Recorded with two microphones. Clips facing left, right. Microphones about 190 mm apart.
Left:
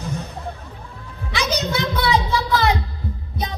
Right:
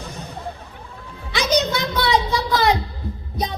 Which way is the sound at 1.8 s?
35° right (ahead or behind).